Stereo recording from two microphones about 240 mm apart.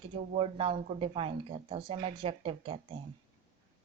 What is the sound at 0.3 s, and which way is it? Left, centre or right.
Speech, right.